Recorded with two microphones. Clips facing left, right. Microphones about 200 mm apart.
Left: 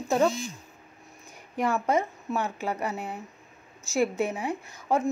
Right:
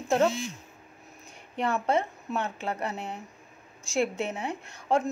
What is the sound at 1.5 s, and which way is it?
Speech, 10° left (ahead or behind).